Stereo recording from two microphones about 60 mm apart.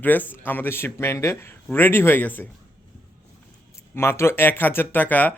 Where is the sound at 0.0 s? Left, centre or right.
Left.